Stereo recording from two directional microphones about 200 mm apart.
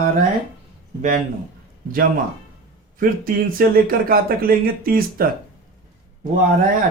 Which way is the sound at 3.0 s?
45° right (ahead or behind).